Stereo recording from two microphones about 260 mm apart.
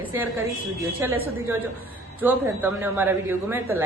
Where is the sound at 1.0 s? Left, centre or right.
Centre.